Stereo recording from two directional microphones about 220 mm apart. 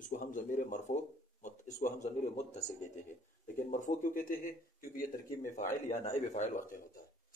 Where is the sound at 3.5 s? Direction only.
35° left (ahead or behind).